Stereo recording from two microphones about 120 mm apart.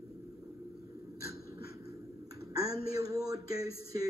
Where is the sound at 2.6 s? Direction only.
30° right (ahead or behind).